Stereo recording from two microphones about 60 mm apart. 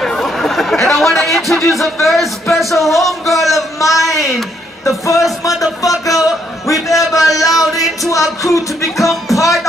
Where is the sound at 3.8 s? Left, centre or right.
Left.